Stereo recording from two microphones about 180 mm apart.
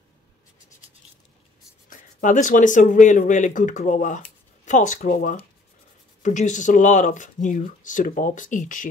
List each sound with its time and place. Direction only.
1.9 s speech: 45° left (ahead or behind)